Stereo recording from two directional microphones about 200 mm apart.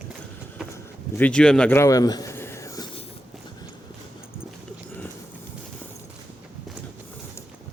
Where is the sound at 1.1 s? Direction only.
5° left (ahead or behind).